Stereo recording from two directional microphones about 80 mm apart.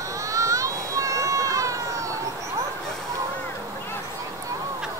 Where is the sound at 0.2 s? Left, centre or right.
Right.